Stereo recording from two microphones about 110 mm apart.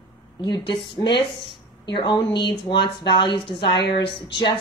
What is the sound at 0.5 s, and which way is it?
Speech, 45° left (ahead or behind).